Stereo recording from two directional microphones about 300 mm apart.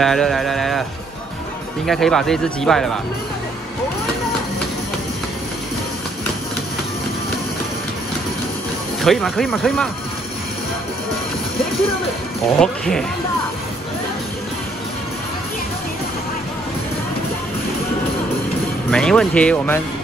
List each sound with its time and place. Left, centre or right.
0.0 s a sound: centre
1.9 s speech: centre
9.0 s speech: centre
12.5 s speech: centre
18.9 s speech: centre